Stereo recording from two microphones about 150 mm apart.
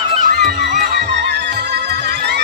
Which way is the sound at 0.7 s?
75° right (ahead or behind).